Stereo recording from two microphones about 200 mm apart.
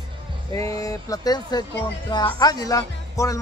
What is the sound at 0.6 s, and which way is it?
Speech, 15° left (ahead or behind).